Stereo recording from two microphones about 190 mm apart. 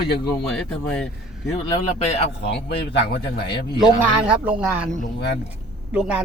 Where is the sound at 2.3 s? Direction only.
60° left (ahead or behind).